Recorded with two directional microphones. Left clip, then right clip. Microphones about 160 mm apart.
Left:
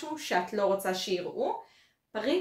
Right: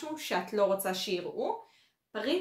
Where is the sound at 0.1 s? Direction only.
25° right (ahead or behind).